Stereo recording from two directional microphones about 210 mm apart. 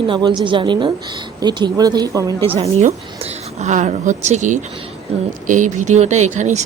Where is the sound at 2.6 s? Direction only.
30° right (ahead or behind).